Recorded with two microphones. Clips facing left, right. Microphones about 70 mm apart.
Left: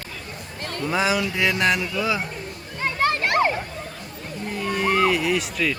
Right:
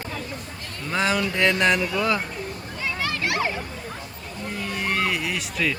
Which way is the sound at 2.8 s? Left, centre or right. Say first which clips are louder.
Left 5 dB; left.